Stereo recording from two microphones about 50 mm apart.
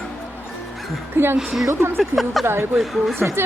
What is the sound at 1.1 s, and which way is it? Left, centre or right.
Speech, right.